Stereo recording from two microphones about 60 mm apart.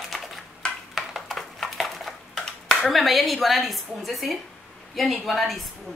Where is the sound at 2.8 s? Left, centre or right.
Centre.